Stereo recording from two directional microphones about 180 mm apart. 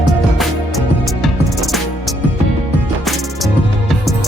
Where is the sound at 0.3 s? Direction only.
Centre (ahead or behind).